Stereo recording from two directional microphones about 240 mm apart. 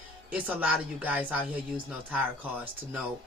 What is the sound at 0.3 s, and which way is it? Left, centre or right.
Speech, centre.